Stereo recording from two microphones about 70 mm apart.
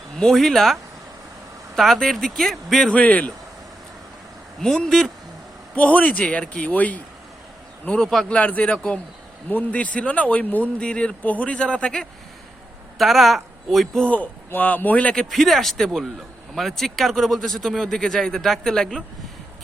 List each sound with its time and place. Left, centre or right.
0.2 s speech: centre
2.9 s speech: centre
4.6 s speech: centre
5.7 s speech: left
8.0 s speech: centre
8.3 s speech: left
8.7 s speech: centre
9.5 s speech: left
13.0 s speech: centre
14.0 s speech: left
15.3 s speech: centre